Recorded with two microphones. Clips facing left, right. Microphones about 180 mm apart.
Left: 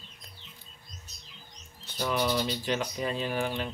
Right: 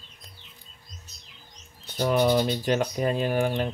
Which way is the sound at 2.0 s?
45° right (ahead or behind).